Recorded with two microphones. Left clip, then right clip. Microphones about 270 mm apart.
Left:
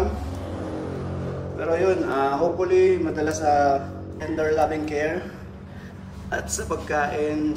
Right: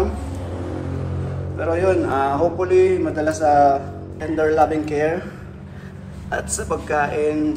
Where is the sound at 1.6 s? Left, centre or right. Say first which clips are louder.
Right 3 dB; centre.